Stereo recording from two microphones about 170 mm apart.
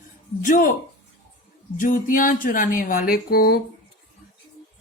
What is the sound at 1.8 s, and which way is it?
Speech, 50° left (ahead or behind).